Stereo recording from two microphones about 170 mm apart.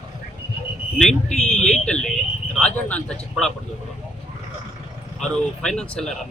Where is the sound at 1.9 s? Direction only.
5° left (ahead or behind).